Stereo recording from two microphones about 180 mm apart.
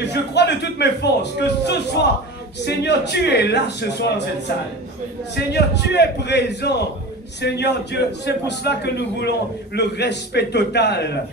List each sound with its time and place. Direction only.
0.0 s a man's voice: 70° left (ahead or behind)
5.3 s a man's voice: 70° left (ahead or behind)